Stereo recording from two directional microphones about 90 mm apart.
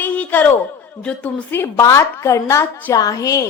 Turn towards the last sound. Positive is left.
turn(degrees=40)  # may be behind; listen again after turning